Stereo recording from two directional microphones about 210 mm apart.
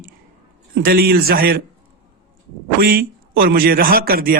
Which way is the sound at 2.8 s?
45° right (ahead or behind).